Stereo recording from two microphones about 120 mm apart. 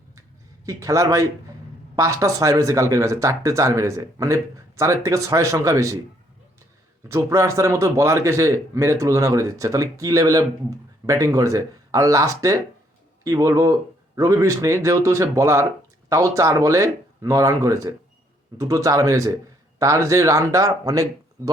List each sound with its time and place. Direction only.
0.6 s a man's voice: 25° right (ahead or behind)
7.1 s a man's voice: 25° right (ahead or behind)